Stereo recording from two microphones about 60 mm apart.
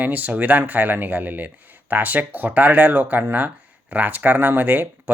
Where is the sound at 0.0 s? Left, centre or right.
Right.